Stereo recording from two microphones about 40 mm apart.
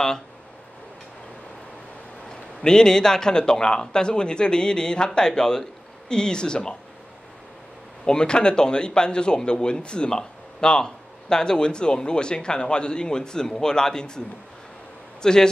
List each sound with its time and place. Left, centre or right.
2.2 s a man's voice: centre
8.0 s a man's voice: left
15.2 s speech: centre